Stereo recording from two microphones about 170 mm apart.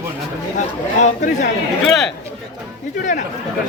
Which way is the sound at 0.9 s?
45° left (ahead or behind).